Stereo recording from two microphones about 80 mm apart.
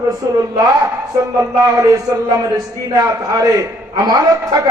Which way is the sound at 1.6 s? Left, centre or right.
Right.